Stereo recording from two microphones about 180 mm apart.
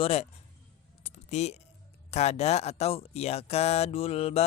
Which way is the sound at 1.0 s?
40° left (ahead or behind).